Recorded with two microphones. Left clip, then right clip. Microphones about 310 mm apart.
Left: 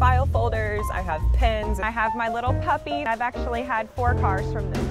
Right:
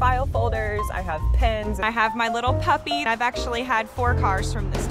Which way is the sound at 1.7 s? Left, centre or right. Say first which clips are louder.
Right 2 dB; left.